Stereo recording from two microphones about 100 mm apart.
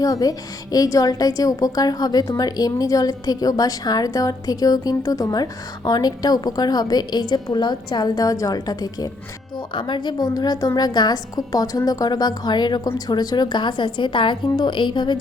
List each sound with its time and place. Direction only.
0.0 s a woman's voice: 40° left (ahead or behind)
9.7 s a woman's voice: 55° left (ahead or behind)